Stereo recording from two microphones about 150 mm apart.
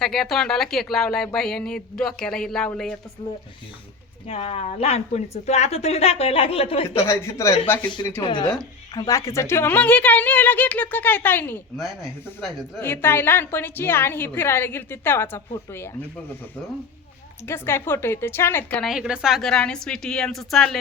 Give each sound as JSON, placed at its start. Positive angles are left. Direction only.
{"t": 0.0, "sound": "speech", "side_deg": 0}
{"t": 4.3, "sound": "a woman's voice", "side_deg": 45}
{"t": 6.9, "sound": "a woman's voice", "side_deg": 15}
{"t": 7.9, "sound": "a woman's voice", "side_deg": 30}
{"t": 12.4, "sound": "speech", "side_deg": 0}
{"t": 12.8, "sound": "a woman's voice", "side_deg": 15}
{"t": 17.4, "sound": "a woman's voice", "side_deg": 15}
{"t": 18.8, "sound": "speech", "side_deg": -5}